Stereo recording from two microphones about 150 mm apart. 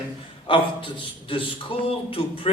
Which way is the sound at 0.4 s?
35° left (ahead or behind).